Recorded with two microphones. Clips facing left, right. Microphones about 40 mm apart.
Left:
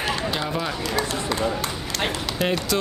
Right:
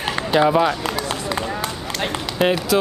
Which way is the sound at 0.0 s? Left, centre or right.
Right.